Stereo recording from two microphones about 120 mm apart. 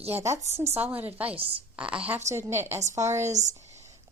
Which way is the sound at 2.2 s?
20° right (ahead or behind).